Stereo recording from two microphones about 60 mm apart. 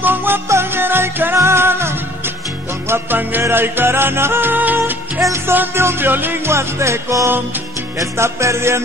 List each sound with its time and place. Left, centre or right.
0.0 s music: right
7.2 s music: right
8.0 s music: right